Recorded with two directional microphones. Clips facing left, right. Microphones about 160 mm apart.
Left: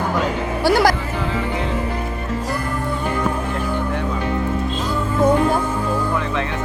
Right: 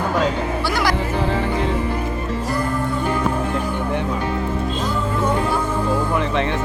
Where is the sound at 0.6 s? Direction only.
40° left (ahead or behind).